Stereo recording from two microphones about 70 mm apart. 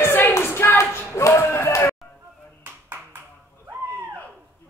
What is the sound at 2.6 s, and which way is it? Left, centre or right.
Clapping, right.